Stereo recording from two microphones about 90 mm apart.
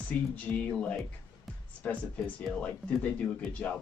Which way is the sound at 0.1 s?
20° left (ahead or behind).